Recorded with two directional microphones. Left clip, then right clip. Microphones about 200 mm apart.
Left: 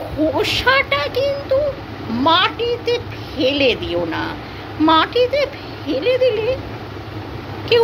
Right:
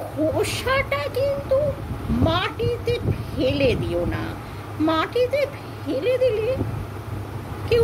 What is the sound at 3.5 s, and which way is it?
Speech, 35° left (ahead or behind).